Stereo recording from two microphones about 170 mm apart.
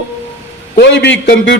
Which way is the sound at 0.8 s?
90° left.